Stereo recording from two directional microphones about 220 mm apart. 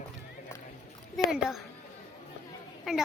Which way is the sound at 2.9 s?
Centre (ahead or behind).